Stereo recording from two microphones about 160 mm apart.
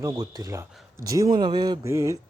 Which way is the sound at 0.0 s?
20° right (ahead or behind).